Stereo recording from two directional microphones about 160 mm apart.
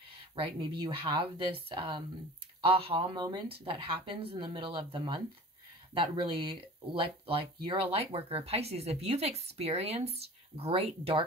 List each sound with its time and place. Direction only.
0.8 s speech: 30° right (ahead or behind)